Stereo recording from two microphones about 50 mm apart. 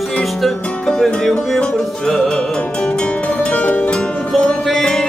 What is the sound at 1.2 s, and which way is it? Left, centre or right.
Music, centre.